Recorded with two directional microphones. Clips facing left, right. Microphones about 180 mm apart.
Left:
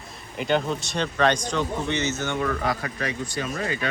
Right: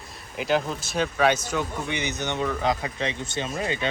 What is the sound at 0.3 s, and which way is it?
Speech, centre (ahead or behind).